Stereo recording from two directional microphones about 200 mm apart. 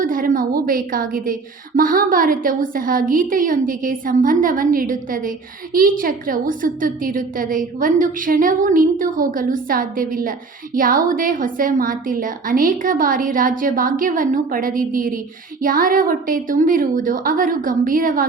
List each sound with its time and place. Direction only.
0.0 s a woman's voice: 45° right (ahead or behind)